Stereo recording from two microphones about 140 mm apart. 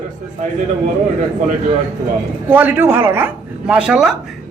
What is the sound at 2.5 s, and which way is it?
Speech, 15° right (ahead or behind).